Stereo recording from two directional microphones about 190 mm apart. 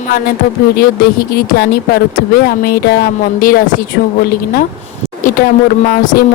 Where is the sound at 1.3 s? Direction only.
55° left (ahead or behind).